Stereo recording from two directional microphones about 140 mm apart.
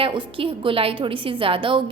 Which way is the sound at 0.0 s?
35° right (ahead or behind).